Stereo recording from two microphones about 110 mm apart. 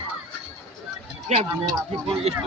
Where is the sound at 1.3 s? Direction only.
90° right.